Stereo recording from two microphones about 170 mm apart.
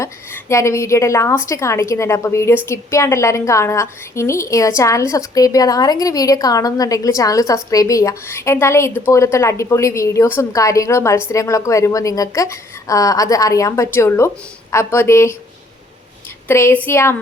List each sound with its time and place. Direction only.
0.0 s a woman's voice: 15° left (ahead or behind)
16.5 s a woman's voice: 15° left (ahead or behind)